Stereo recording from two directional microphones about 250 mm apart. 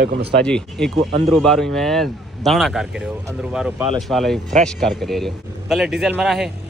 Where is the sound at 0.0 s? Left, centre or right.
Right.